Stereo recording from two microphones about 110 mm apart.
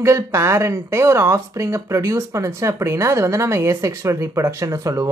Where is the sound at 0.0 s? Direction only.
25° right (ahead or behind).